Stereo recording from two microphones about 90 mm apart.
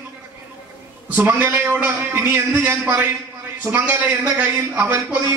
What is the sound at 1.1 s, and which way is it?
A man's voice, 25° right (ahead or behind).